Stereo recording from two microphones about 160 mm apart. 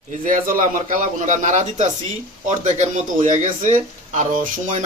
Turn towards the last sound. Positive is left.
turn(degrees=-50)  # may be behind; listen again after turning